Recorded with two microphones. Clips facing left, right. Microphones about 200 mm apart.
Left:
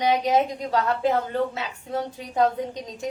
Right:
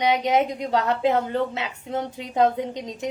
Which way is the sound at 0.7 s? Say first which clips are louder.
Right 1 dB; 20° right (ahead or behind).